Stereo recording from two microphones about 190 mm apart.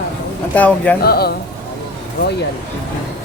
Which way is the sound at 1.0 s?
55° left (ahead or behind).